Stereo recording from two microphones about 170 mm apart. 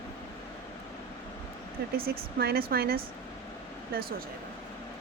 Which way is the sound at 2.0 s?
65° right (ahead or behind).